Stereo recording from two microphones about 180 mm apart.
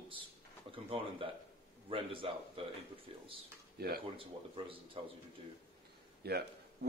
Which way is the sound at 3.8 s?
60° right (ahead or behind).